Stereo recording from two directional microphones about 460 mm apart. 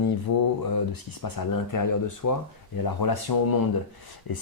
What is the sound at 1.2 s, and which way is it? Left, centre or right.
Speech, left.